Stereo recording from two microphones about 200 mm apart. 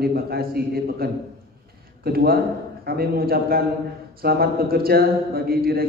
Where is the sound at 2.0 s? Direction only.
50° right (ahead or behind).